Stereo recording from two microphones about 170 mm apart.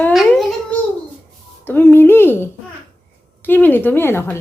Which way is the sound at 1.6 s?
10° left (ahead or behind).